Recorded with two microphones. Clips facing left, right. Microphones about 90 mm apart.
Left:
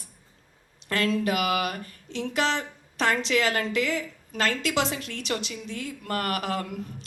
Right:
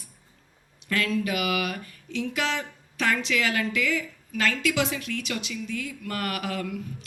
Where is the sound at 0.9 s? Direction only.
35° left (ahead or behind).